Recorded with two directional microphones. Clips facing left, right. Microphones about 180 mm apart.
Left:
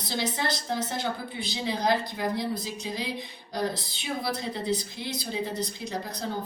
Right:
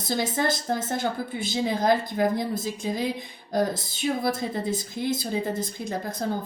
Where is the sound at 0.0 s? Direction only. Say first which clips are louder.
Right 4 dB; 50° right (ahead or behind).